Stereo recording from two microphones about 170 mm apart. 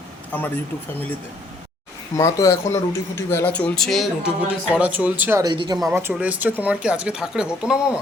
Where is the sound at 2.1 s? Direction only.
20° left (ahead or behind); by 5.4 s 10° right (ahead or behind).